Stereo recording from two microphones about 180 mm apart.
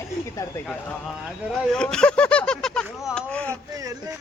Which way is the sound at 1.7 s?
5° left (ahead or behind).